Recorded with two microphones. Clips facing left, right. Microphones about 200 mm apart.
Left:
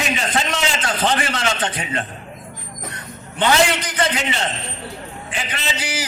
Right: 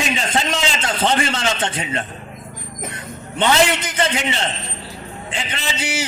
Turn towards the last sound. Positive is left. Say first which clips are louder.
# right 2 dB
turn(degrees=-25)  # may be behind; listen again after turning